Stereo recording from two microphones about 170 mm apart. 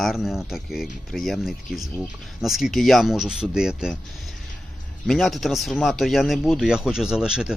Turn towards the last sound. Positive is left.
turn(degrees=-5)  # may be behind; listen again after turning